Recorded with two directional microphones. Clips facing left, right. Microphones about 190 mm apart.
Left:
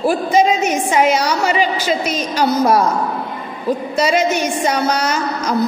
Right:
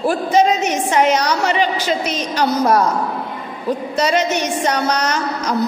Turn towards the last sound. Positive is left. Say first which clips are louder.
# left 1 dB
turn(degrees=10)  # may be behind; listen again after turning